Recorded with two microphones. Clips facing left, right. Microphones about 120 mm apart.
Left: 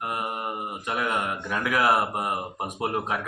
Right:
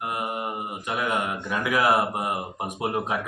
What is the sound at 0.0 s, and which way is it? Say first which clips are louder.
A man's voice: right 1 dB; 20° right (ahead or behind).